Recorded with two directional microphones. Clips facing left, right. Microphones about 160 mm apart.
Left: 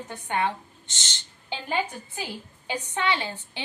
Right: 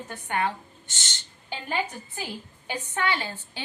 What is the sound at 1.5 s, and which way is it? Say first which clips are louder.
A woman's voice: left 1 dB; 15° left (ahead or behind).